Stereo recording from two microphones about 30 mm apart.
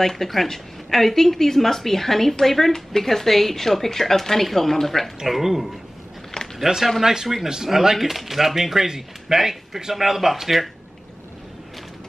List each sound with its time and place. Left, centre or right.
0.0 s speech: centre
5.2 s speech: centre